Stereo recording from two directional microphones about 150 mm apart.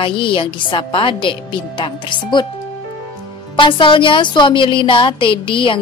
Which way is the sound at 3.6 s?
35° left (ahead or behind).